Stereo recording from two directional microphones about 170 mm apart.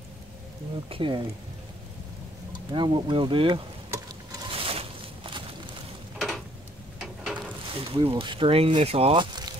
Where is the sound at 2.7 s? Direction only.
30° right (ahead or behind).